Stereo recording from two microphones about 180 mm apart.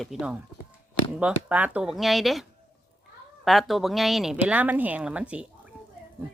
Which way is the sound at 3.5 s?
Centre (ahead or behind).